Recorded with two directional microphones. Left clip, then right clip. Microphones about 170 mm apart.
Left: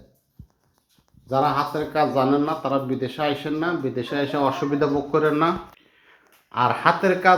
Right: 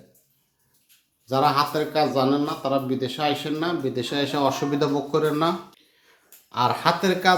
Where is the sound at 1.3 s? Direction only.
10° right (ahead or behind).